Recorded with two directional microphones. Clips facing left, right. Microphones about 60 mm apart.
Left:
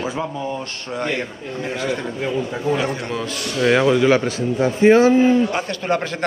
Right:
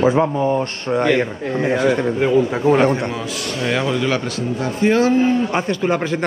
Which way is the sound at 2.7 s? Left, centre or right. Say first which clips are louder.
Right 6 dB; right.